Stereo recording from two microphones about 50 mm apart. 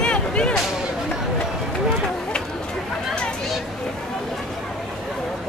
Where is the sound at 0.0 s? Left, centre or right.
Centre.